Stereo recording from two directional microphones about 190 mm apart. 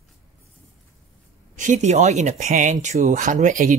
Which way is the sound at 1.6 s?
40° right (ahead or behind).